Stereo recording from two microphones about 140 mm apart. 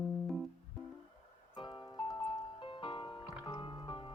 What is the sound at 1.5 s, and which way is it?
Music, 35° left (ahead or behind).